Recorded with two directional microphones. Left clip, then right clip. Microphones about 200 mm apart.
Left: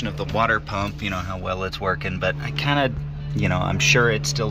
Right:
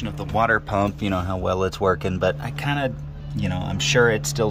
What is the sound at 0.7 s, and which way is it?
Speech, 45° right (ahead or behind).